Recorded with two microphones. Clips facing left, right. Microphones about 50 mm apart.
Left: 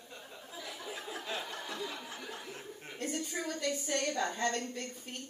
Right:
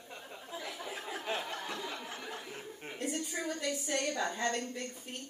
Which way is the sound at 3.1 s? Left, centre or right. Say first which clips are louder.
Left 1 dB; centre.